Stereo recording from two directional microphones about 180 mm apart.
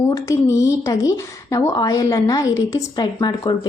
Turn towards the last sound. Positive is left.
turn(degrees=25)  # may be behind; listen again after turning